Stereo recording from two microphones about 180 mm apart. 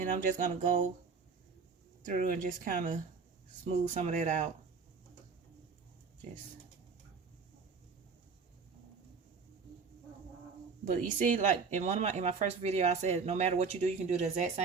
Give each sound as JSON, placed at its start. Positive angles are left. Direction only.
{"t": 0.0, "sound": "speech", "side_deg": -45}
{"t": 2.0, "sound": "speech", "side_deg": -50}
{"t": 10.8, "sound": "speech", "side_deg": -45}